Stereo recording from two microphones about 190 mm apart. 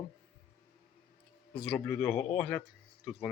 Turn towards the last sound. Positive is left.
turn(degrees=0)  # may be behind; listen again after turning